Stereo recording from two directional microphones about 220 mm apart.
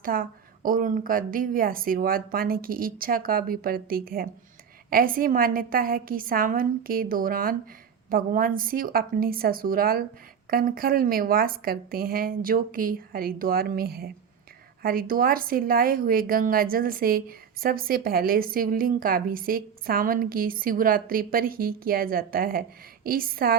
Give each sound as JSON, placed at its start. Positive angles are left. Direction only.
{"t": 0.0, "sound": "a woman's voice", "side_deg": -40}